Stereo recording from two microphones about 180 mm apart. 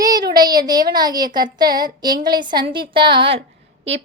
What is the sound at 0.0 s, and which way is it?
Child singing, 20° right (ahead or behind).